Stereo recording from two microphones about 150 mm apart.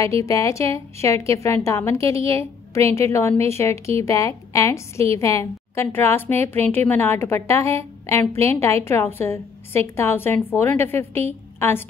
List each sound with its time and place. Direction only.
0.0 s a woman's voice: 20° left (ahead or behind)